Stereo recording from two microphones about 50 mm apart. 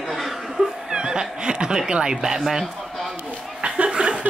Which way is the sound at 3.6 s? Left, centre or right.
Right.